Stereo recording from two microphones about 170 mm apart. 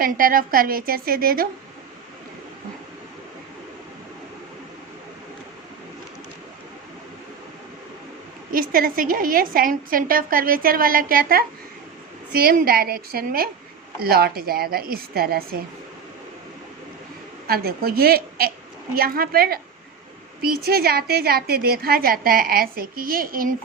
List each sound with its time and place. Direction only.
0.0 s a woman's voice: 55° right (ahead or behind)
8.5 s a woman's voice: 60° right (ahead or behind)
17.4 s a woman's voice: 65° right (ahead or behind)